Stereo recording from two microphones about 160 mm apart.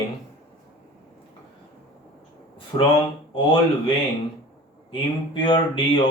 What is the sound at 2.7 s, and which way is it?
Speech, 30° left (ahead or behind).